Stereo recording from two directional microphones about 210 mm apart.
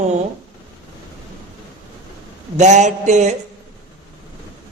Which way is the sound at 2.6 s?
35° right (ahead or behind).